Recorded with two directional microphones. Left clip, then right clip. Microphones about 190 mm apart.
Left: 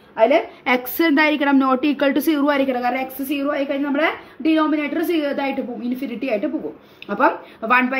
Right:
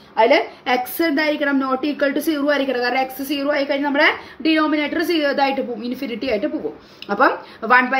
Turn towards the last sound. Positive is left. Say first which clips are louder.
# right 2 dB
turn(degrees=15)  # may be behind; listen again after turning